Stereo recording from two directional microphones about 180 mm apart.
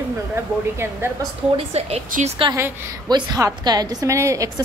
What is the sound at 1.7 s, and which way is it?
Speech, 35° right (ahead or behind).